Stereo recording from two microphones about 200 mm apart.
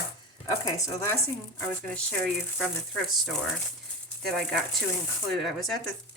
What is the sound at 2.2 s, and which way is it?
Speech, centre (ahead or behind).